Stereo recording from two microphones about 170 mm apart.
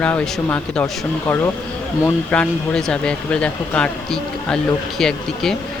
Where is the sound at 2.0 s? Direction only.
10° left (ahead or behind).